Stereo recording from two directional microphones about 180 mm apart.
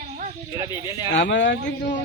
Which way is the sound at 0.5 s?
20° right (ahead or behind).